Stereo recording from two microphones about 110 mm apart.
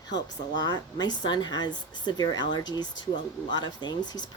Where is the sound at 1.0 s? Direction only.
40° left (ahead or behind).